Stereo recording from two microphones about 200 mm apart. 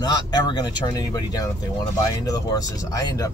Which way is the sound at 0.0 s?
20° left (ahead or behind).